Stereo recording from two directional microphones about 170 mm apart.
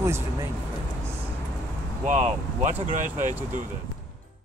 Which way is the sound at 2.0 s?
45° right (ahead or behind).